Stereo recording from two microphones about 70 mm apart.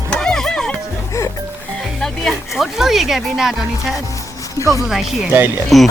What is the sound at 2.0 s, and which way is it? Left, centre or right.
Music, centre.